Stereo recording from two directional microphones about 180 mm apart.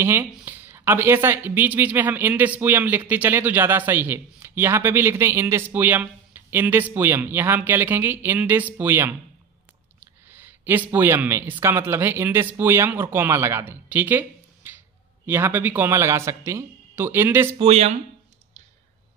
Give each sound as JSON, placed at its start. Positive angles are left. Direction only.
{"t": 0.0, "sound": "speech", "side_deg": -15}
{"t": 10.2, "sound": "speech", "side_deg": -10}
{"t": 17.6, "sound": "speech", "side_deg": -35}